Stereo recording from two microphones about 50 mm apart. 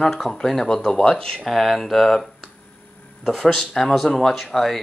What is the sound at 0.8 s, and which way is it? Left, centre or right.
Speech, centre.